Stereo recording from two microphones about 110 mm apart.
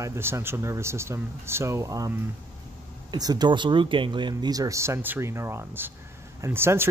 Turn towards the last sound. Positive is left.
turn(degrees=-20)  # may be behind; listen again after turning